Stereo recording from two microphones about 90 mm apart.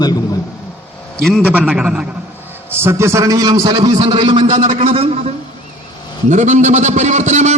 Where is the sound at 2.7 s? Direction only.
30° right (ahead or behind); by 5.1 s 90° right.